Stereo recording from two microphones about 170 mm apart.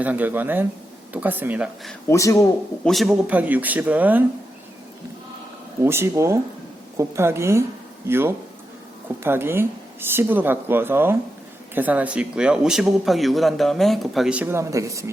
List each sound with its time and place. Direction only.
0.0 s speech: 10° right (ahead or behind)
2.0 s speech: 20° left (ahead or behind)
2.8 s speech: centre (ahead or behind)
5.8 s speech: 15° right (ahead or behind)